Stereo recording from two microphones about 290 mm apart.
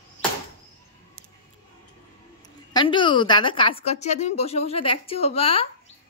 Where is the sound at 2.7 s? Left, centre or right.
Centre.